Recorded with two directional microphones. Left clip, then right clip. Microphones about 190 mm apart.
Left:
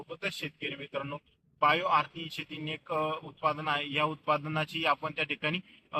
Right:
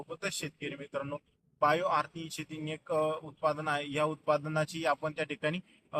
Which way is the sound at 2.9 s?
15° right (ahead or behind).